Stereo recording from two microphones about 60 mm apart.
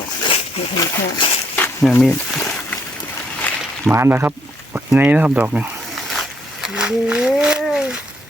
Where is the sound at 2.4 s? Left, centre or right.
Left.